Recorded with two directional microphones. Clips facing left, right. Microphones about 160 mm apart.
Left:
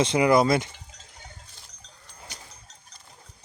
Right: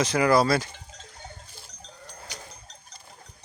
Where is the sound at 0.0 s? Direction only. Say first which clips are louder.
Left 1 dB; 20° left (ahead or behind).